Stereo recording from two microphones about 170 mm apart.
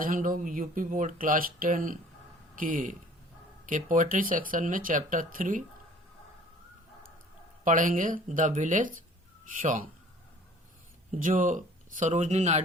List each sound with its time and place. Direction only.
0.0 s speech: 55° right (ahead or behind)
7.6 s speech: 50° right (ahead or behind)
11.1 s speech: 50° right (ahead or behind)